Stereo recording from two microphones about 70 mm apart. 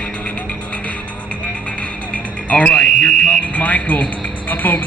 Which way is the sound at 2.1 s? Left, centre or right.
Centre.